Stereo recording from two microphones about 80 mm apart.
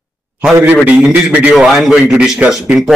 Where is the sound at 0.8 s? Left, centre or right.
Centre.